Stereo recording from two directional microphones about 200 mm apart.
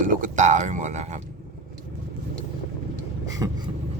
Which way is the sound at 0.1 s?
40° right (ahead or behind).